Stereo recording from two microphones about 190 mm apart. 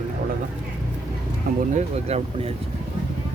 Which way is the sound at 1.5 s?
55° right (ahead or behind).